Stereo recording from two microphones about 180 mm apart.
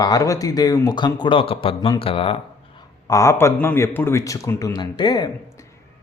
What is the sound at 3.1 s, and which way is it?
A man's voice, 15° left (ahead or behind).